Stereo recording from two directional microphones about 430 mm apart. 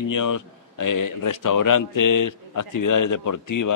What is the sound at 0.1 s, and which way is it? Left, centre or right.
A man's voice, left.